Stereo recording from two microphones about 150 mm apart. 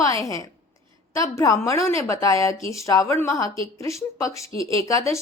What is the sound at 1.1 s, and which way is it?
A woman's voice, 20° left (ahead or behind).